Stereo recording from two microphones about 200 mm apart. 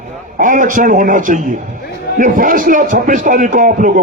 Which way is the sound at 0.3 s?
40° right (ahead or behind).